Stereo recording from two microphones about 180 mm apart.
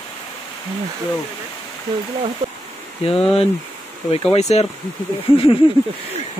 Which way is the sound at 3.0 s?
35° left (ahead or behind).